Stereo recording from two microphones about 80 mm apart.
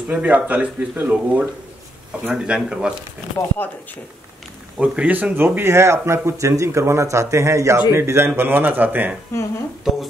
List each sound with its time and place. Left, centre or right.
0.1 s speech: centre
3.3 s speech: left
4.7 s speech: centre
9.3 s speech: left